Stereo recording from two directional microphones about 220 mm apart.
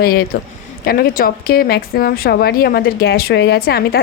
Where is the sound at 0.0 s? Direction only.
45° left (ahead or behind).